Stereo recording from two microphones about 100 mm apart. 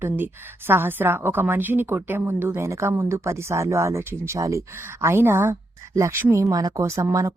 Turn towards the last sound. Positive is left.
turn(degrees=-30)  # may be behind; listen again after turning